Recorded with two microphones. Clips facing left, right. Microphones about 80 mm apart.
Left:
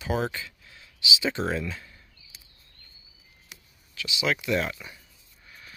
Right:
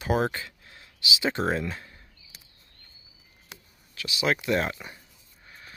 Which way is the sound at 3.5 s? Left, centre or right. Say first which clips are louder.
Even; right.